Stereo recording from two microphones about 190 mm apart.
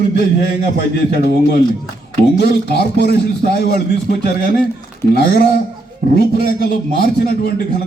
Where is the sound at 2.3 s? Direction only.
60° left (ahead or behind).